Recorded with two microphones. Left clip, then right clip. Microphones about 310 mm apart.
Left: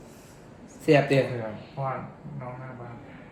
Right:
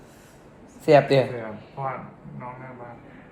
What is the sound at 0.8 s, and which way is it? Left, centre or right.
Speech, centre.